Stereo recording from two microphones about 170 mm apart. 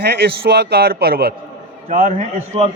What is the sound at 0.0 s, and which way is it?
A man's voice, 65° right (ahead or behind).